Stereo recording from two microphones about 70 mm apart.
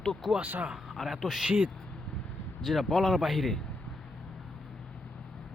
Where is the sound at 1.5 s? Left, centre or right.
Centre.